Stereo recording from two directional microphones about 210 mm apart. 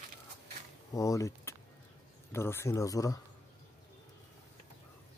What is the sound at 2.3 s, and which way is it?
Speech, 10° left (ahead or behind).